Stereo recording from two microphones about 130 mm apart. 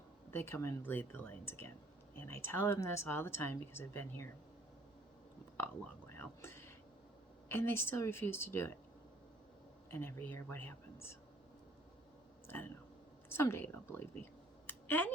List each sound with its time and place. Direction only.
0.3 s a woman's voice: 20° left (ahead or behind)
5.5 s speech: 15° left (ahead or behind)
9.9 s speech: 15° left (ahead or behind)
12.5 s a woman's voice: 15° left (ahead or behind)
14.7 s a sound: 15° left (ahead or behind)